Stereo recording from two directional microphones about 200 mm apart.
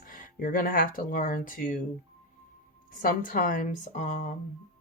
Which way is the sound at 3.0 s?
45° left (ahead or behind).